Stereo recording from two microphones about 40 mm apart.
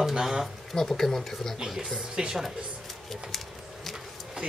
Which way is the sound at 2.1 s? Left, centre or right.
Centre.